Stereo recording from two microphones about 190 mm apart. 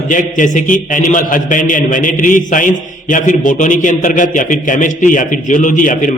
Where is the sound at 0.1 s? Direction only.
40° left (ahead or behind).